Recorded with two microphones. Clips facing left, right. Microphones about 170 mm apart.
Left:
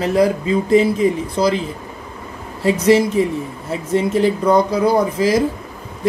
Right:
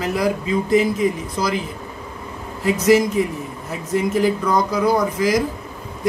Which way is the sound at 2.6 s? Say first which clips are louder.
Left 2 dB; 30° left (ahead or behind).